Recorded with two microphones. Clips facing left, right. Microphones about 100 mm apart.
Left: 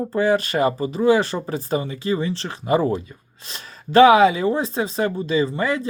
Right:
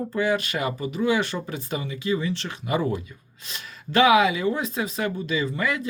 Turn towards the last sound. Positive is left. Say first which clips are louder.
# left 5 dB
turn(degrees=30)  # may be behind; listen again after turning